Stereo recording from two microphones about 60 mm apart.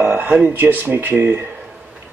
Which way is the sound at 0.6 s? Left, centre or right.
Right.